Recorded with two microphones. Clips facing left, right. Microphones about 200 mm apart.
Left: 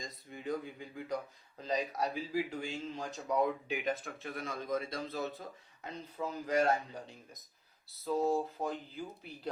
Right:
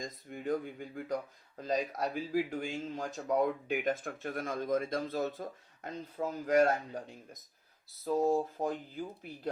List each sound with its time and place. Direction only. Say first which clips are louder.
0.0 s speech: right 4 dB; 50° right (ahead or behind)
8.0 s speech: right 2 dB; 45° right (ahead or behind)